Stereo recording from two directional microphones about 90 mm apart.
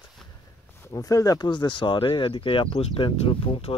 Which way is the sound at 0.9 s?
40° left (ahead or behind).